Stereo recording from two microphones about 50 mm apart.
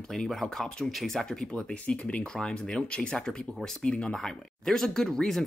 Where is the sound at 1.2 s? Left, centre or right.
Centre.